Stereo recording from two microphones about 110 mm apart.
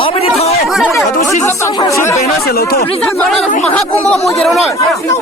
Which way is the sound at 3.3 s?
5° left (ahead or behind).